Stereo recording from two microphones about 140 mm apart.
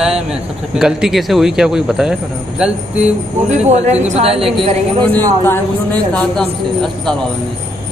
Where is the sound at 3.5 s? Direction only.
55° right (ahead or behind).